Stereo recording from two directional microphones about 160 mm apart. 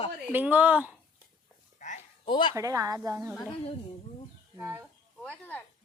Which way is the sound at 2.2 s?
30° left (ahead or behind).